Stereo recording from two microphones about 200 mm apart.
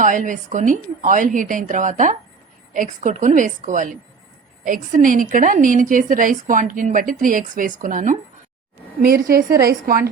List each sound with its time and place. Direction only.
0.0 s a woman's voice: 40° right (ahead or behind)